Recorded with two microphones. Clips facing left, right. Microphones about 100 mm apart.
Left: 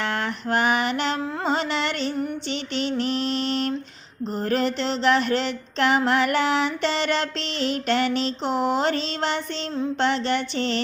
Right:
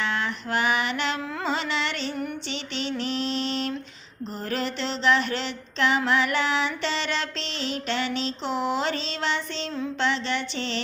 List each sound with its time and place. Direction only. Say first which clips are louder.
0.0 s music: left 2 dB; 50° left (ahead or behind)
3.0 s mantra: left 3 dB; 45° left (ahead or behind)
4.4 s music: left 6 dB; 45° left (ahead or behind)